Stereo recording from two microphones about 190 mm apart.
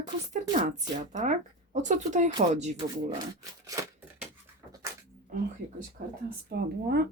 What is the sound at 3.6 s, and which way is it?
Scissors, 15° right (ahead or behind).